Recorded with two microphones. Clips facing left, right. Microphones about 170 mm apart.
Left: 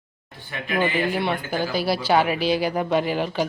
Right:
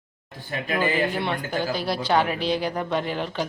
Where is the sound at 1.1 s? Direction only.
5° left (ahead or behind).